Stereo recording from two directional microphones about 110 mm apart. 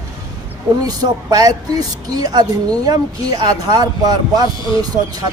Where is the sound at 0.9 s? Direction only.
35° right (ahead or behind).